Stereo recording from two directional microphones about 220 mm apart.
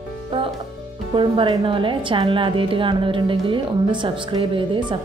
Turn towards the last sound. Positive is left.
turn(degrees=-20)  # may be behind; listen again after turning